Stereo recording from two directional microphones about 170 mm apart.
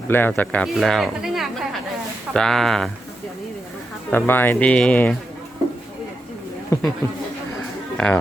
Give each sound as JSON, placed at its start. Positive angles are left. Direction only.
{"t": 0.1, "sound": "speech", "side_deg": 10}
{"t": 4.1, "sound": "speech", "side_deg": 10}
{"t": 6.7, "sound": "speech", "side_deg": 15}
{"t": 7.9, "sound": "speech", "side_deg": 5}